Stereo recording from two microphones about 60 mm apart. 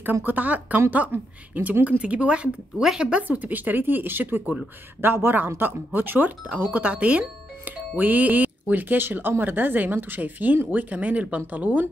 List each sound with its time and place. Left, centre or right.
0.0 s a woman's voice: right
2.8 s speech: centre
3.1 s a woman's voice: right